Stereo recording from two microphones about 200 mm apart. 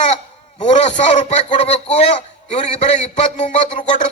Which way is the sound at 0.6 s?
35° left (ahead or behind).